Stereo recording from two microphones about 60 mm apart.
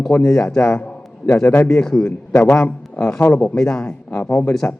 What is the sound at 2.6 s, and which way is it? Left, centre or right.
Speech, left.